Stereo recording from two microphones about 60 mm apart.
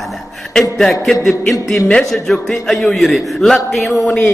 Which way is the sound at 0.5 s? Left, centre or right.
Centre.